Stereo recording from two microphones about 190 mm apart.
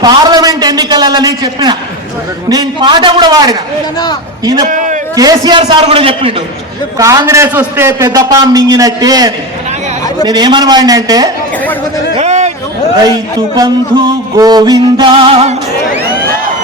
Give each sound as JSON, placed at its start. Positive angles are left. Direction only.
{"t": 0.0, "sound": "a sound", "side_deg": -20}
{"t": 2.5, "sound": "music", "side_deg": -20}
{"t": 4.6, "sound": "a man's voice", "side_deg": -40}
{"t": 5.1, "sound": "music", "side_deg": -20}
{"t": 7.0, "sound": "a man's voice", "side_deg": -15}
{"t": 10.2, "sound": "music", "side_deg": -20}
{"t": 12.1, "sound": "a sound", "side_deg": -35}
{"t": 13.6, "sound": "music", "side_deg": -20}